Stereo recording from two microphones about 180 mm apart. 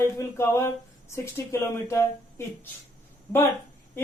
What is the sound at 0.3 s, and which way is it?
Speech, 15° left (ahead or behind).